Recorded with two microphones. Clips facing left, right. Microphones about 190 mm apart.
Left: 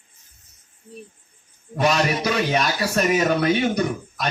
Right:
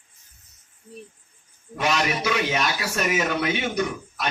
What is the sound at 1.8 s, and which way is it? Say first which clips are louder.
A man's voice: left 4 dB; 40° left (ahead or behind).